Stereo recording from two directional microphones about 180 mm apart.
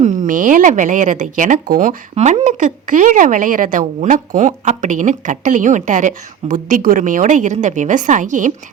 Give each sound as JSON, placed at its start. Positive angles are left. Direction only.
{"t": 0.0, "sound": "speech", "side_deg": -45}